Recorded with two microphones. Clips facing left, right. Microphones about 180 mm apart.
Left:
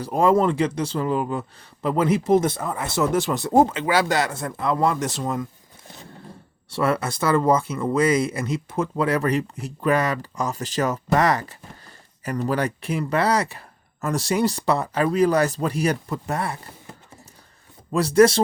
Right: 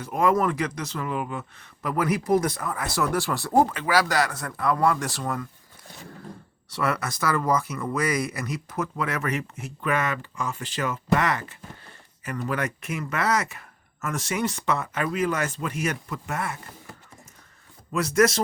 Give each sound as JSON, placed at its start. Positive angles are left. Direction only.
{"t": 0.0, "sound": "speech", "side_deg": 30}
{"t": 6.7, "sound": "speech", "side_deg": 25}
{"t": 17.9, "sound": "speech", "side_deg": 30}